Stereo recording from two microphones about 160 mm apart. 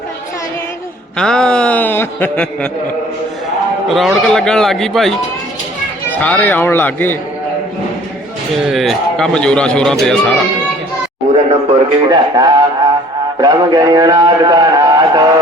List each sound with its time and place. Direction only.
1.1 s a man's voice: 5° left (ahead or behind)
3.8 s a man's voice: centre (ahead or behind)
8.5 s a man's voice: centre (ahead or behind)
11.7 s a man's voice: 25° right (ahead or behind)